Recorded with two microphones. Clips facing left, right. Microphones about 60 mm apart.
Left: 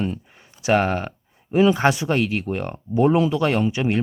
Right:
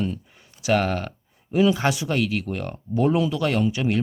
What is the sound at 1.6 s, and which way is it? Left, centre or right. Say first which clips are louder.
Speech: left 3 dB; left.